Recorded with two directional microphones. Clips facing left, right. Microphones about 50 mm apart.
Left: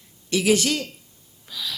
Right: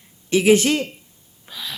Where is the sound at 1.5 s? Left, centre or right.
Right.